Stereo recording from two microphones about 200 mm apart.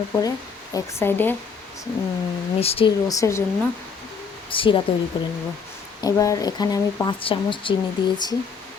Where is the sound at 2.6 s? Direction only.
30° left (ahead or behind).